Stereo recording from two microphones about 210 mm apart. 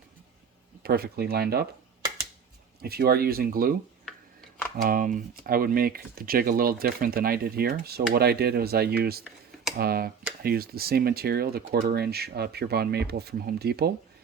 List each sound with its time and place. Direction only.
0.8 s speech: 50° right (ahead or behind)
2.8 s speech: 45° right (ahead or behind)
4.8 s speech: 40° right (ahead or behind)